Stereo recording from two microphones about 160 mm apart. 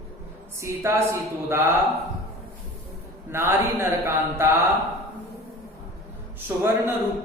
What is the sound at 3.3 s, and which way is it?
Speech, 15° right (ahead or behind).